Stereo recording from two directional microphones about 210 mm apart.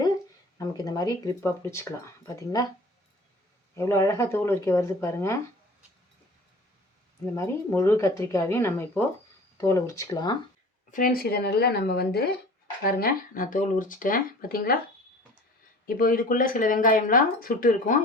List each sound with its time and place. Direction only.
0.9 s speech: 20° left (ahead or behind)
3.8 s speech: 15° left (ahead or behind)
7.3 s speech: 15° left (ahead or behind)
10.9 s speech: 45° left (ahead or behind)
15.9 s speech: 40° left (ahead or behind)